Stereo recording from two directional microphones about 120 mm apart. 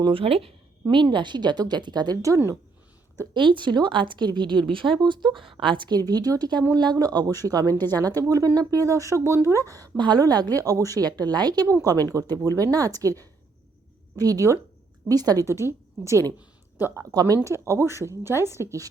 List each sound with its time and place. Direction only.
0.0 s a woman's voice: 50° right (ahead or behind); by 2.6 s 25° right (ahead or behind)
3.3 s a woman's voice: 40° right (ahead or behind)
7.7 s a woman's voice: 15° left (ahead or behind)
8.3 s a woman's voice: 30° right (ahead or behind)
17.2 s speech: 30° right (ahead or behind)